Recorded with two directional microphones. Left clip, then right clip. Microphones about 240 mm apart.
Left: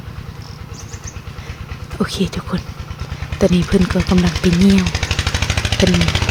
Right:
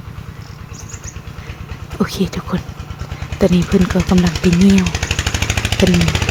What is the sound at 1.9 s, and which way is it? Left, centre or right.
Speech, centre.